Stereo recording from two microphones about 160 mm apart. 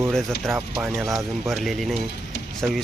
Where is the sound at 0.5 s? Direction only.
15° right (ahead or behind).